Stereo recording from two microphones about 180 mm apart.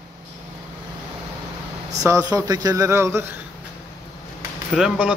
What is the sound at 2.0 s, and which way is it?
A man's voice, 20° right (ahead or behind).